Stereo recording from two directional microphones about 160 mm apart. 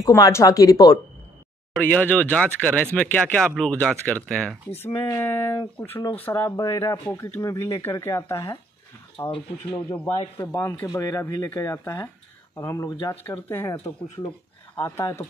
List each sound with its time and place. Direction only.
0.0 s speech: 20° left (ahead or behind)
1.8 s speech: 10° left (ahead or behind)
5.0 s speech: 20° left (ahead or behind)
5.3 s speech: 35° left (ahead or behind)
6.2 s speech: 15° left (ahead or behind)
10.4 s speech: 20° left (ahead or behind)